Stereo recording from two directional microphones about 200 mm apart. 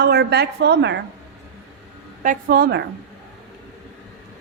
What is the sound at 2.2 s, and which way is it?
Speech, 45° right (ahead or behind).